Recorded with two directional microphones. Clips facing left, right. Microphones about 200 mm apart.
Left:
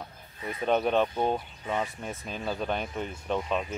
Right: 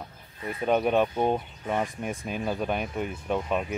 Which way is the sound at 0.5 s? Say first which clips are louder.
Right 2 dB; 5° right (ahead or behind).